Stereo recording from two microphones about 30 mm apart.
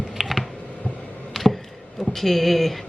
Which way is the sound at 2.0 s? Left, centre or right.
Centre.